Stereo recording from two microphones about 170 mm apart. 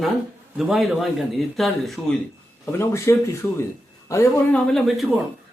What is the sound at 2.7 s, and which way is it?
Speech, 15° left (ahead or behind).